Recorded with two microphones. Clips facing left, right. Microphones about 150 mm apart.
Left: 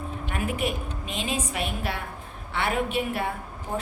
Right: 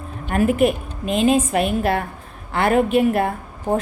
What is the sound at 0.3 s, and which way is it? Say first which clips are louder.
A woman's voice: right 12 dB; 55° right (ahead or behind).